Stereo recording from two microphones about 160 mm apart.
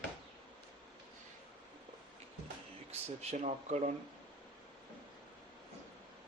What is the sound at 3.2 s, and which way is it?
Speech, 40° right (ahead or behind).